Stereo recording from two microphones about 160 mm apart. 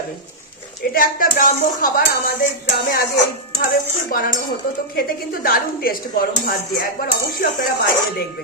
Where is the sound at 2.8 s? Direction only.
70° left (ahead or behind).